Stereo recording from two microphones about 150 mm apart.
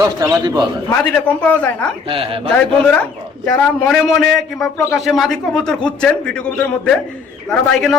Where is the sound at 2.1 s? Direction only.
40° right (ahead or behind).